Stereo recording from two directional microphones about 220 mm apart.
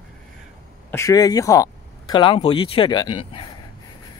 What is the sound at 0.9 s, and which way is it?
Speech, 15° left (ahead or behind).